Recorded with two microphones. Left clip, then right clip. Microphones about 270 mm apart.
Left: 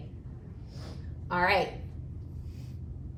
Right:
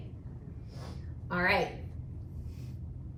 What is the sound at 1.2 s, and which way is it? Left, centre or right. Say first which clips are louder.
Speech: left 3 dB; centre.